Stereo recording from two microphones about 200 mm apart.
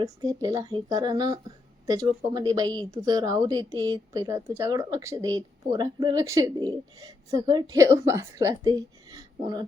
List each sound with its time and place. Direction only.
0.0 s speech: 15° right (ahead or behind)